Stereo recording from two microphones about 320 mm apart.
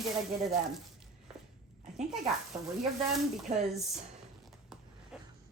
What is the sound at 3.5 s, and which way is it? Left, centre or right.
Speech, centre.